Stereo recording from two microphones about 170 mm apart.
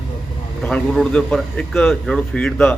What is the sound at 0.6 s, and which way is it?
A man's voice, centre (ahead or behind).